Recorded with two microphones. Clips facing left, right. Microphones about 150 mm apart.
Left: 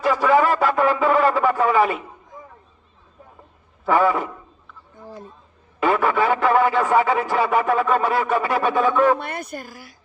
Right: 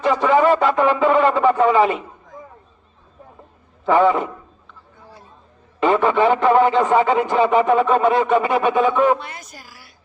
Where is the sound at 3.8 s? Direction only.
20° right (ahead or behind).